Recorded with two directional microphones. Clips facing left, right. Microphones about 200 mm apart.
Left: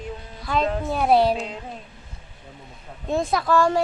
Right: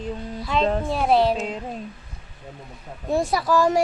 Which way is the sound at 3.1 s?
10° right (ahead or behind).